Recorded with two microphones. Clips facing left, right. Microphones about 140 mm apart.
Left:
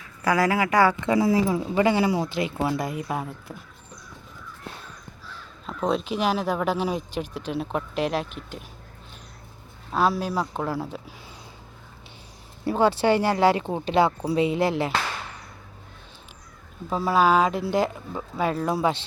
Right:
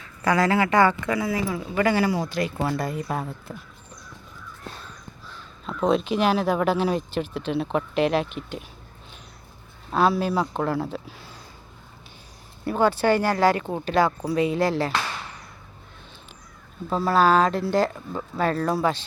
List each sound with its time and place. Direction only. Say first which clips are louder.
0.3 s speech: right 1 dB; 10° left (ahead or behind)
1.0 s speech: left 4 dB; 25° left (ahead or behind); by 3.5 s 10° left (ahead or behind)
5.6 s speech: right 3 dB; centre (ahead or behind)
9.9 s speech: right 2 dB; 5° left (ahead or behind)
12.6 s speech: even; 25° left (ahead or behind)
16.9 s speech: right 1 dB; 10° left (ahead or behind)